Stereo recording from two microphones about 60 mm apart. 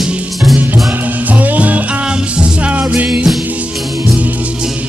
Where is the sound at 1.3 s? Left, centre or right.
Right.